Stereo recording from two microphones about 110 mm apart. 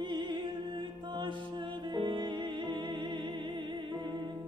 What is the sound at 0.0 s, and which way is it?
Music, 45° right (ahead or behind).